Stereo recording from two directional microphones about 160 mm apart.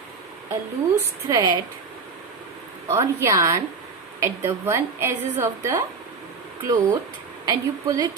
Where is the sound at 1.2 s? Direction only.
25° right (ahead or behind).